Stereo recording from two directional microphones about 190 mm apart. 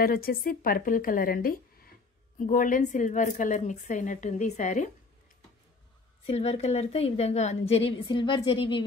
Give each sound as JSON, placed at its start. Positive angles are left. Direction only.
{"t": 0.0, "sound": "a woman's voice", "side_deg": 50}
{"t": 6.2, "sound": "a woman's voice", "side_deg": 30}